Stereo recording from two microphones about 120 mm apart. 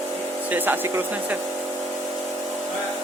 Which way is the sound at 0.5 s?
15° right (ahead or behind).